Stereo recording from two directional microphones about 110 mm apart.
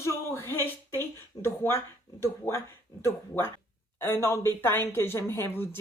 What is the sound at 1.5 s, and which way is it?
Speech, 20° left (ahead or behind).